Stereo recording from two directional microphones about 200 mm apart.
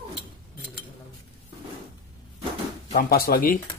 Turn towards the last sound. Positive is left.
turn(degrees=45)  # may be behind; listen again after turning